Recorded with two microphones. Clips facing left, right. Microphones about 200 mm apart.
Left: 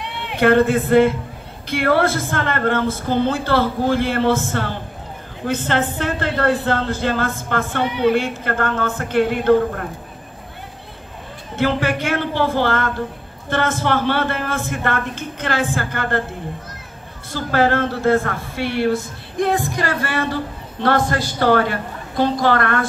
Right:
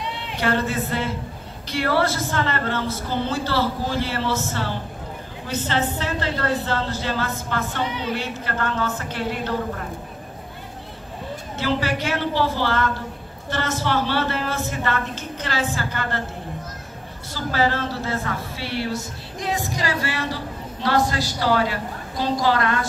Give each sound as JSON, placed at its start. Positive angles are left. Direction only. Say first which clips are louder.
{"t": 0.0, "sound": "a man's voice", "louder": "left 7 dB", "side_deg": 60}
{"t": 11.5, "sound": "a woman's voice", "louder": "left 5 dB", "side_deg": 55}
{"t": 17.3, "sound": "a woman's voice", "louder": "left 5 dB", "side_deg": 55}